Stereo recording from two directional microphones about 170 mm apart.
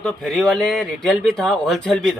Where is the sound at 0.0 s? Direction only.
5° left (ahead or behind).